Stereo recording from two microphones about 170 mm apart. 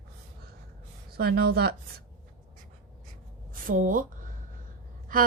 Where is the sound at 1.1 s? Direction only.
65° right (ahead or behind).